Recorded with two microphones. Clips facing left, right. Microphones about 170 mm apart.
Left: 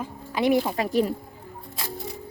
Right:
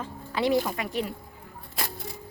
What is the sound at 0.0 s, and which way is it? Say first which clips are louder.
Speech: left 3 dB; 15° left (ahead or behind).